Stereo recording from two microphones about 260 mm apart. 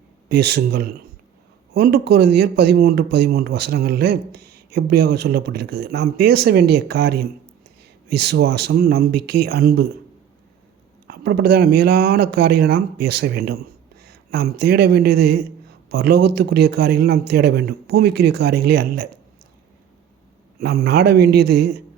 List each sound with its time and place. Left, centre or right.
0.3 s speech: right
11.0 s a man's voice: right
20.6 s speech: right